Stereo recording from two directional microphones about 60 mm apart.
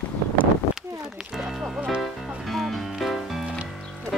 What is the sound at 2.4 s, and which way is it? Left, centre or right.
Music, centre.